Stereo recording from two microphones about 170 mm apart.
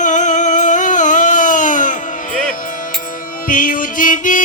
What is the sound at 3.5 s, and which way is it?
Music, 55° left (ahead or behind).